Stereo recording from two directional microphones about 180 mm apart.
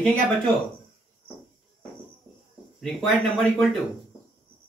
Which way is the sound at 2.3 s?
20° right (ahead or behind).